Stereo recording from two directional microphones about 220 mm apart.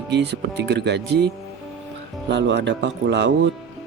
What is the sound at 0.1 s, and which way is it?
A man's voice, 50° right (ahead or behind).